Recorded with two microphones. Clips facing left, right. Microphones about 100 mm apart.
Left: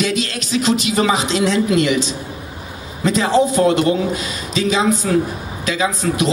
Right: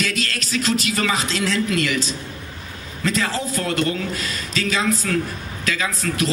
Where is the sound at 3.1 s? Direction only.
20° left (ahead or behind).